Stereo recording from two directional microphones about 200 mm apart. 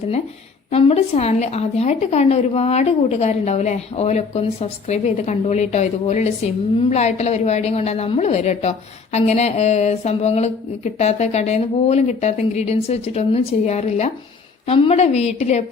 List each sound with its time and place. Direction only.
0.7 s a woman's voice: 30° left (ahead or behind)